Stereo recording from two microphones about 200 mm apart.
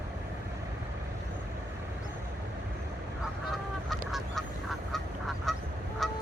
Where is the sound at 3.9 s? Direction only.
Centre (ahead or behind).